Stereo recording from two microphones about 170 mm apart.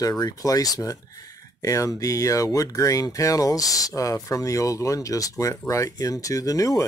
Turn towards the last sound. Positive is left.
turn(degrees=20)  # may be behind; listen again after turning